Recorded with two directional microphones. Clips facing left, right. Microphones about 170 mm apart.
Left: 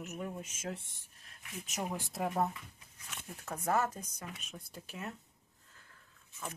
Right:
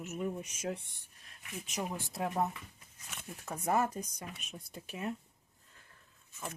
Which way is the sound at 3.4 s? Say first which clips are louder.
Right 1 dB; 10° right (ahead or behind).